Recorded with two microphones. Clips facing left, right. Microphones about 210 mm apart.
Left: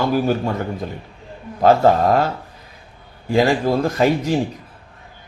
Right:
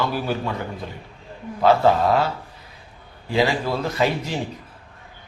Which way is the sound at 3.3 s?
45° left (ahead or behind).